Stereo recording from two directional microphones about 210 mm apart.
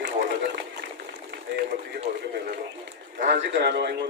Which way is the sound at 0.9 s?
50° right (ahead or behind).